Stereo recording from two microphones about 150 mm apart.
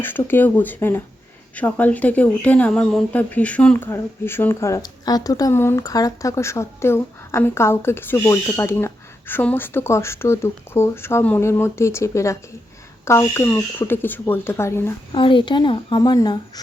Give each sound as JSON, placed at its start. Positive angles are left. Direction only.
{"t": 0.0, "sound": "speech", "side_deg": 15}
{"t": 15.1, "sound": "a woman's voice", "side_deg": 35}